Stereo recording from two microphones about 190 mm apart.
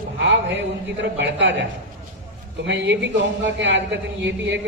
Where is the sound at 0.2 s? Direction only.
70° right (ahead or behind).